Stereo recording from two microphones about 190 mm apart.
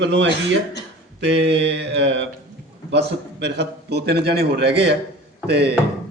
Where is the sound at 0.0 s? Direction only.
70° right (ahead or behind).